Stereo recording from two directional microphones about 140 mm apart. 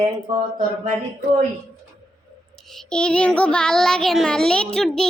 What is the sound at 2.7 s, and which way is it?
Child singing, 5° left (ahead or behind).